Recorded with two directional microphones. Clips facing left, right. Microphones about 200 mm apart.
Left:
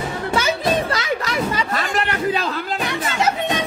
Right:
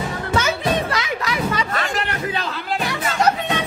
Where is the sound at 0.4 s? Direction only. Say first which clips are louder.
Left 1 dB; 30° left (ahead or behind).